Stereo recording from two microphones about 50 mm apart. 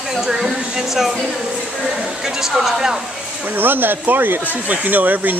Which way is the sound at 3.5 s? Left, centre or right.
Right.